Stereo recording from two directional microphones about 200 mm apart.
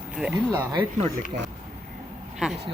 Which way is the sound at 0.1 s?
5° right (ahead or behind).